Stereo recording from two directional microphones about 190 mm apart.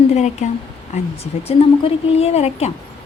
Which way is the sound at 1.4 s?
35° left (ahead or behind).